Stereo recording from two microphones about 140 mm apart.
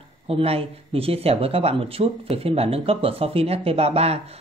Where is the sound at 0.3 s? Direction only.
45° right (ahead or behind).